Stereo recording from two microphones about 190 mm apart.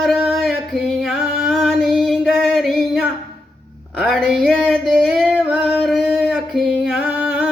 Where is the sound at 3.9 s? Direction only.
Centre (ahead or behind).